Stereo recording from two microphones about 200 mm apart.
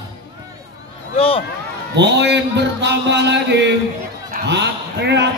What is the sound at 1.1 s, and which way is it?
Speech, 30° left (ahead or behind).